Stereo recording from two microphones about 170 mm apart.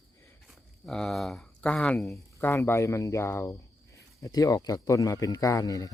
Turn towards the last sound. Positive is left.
turn(degrees=20)  # may be behind; listen again after turning